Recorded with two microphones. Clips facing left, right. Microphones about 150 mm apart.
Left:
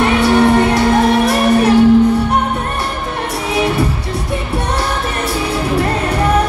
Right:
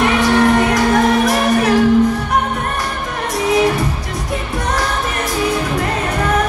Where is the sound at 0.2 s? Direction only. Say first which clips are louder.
Left 3 dB; 30° left (ahead or behind).